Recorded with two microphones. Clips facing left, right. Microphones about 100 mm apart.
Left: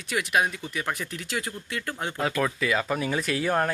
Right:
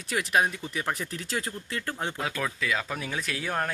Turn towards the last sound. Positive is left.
turn(degrees=5)  # may be behind; listen again after turning